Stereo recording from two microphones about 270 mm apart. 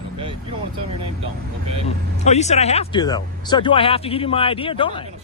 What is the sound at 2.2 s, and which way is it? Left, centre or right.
Speech, left.